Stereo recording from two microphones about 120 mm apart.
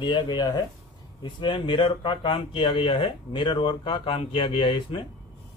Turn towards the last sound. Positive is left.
turn(degrees=45)  # may be behind; listen again after turning